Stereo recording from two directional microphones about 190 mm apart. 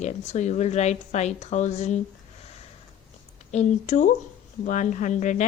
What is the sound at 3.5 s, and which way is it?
Speech, 35° left (ahead or behind).